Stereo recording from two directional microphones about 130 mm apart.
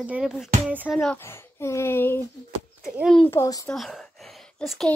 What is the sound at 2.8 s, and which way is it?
Speech, centre (ahead or behind).